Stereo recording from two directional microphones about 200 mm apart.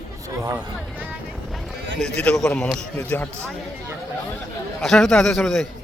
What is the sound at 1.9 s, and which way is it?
A man's voice, 5° left (ahead or behind).